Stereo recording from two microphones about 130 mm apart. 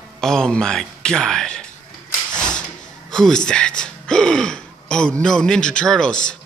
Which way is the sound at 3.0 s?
5° left (ahead or behind).